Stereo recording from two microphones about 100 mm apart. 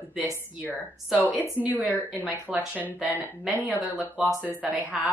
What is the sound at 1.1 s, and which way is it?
A woman's voice, 5° right (ahead or behind).